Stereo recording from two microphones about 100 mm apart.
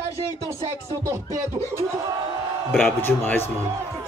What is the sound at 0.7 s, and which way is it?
Speech, 30° right (ahead or behind).